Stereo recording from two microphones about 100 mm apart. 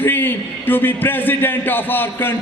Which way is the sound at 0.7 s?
20° left (ahead or behind).